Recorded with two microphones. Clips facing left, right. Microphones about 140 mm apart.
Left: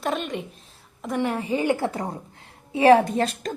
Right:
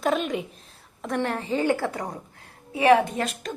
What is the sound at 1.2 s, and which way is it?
A woman's voice, 10° left (ahead or behind).